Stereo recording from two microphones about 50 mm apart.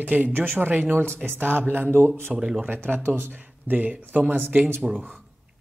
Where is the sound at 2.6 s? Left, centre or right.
Right.